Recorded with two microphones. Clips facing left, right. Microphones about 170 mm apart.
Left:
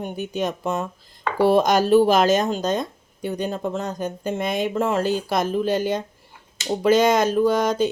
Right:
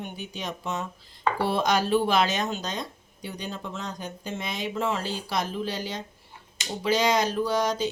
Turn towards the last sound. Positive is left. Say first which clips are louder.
# left 7 dB
turn(degrees=50)  # may be behind; listen again after turning